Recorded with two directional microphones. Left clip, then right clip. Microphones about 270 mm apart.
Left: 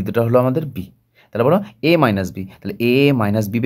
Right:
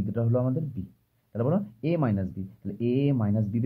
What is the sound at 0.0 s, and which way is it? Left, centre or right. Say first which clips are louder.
Speech: left 13 dB; left.